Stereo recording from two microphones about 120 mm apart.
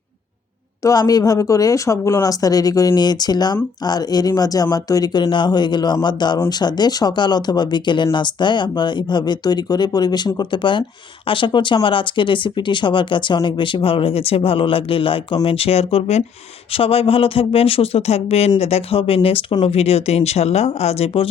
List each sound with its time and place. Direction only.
0.8 s speech: 30° left (ahead or behind); by 21.1 s 65° left (ahead or behind)